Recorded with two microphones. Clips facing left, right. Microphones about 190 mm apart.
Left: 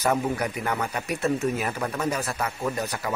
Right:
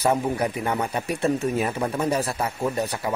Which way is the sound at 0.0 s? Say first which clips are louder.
Right 2 dB; 30° right (ahead or behind).